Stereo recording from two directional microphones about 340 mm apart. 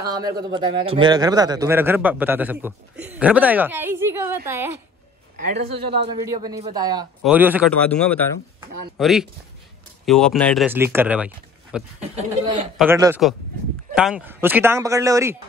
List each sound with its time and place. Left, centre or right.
0.4 s a man's voice: centre
5.4 s a man's voice: right
6.2 s speech: centre
12.0 s speech: centre
12.7 s a man's voice: centre